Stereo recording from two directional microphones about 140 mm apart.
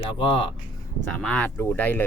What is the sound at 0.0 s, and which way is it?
Speech, 40° left (ahead or behind).